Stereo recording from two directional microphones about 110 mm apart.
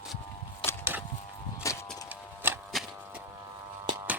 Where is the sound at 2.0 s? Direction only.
20° right (ahead or behind).